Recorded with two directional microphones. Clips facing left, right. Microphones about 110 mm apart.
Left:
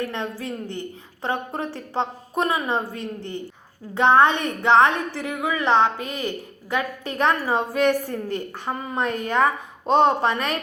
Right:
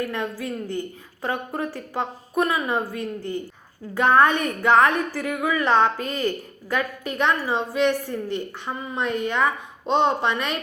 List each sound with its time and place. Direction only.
0.0 s a woman's voice: 25° left (ahead or behind)